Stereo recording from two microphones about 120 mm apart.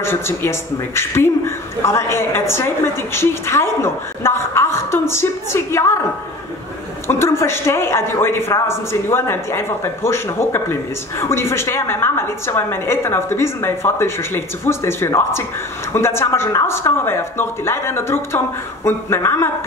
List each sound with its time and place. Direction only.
0.0 s a woman's voice: 20° left (ahead or behind)
7.1 s a woman's voice: 20° left (ahead or behind)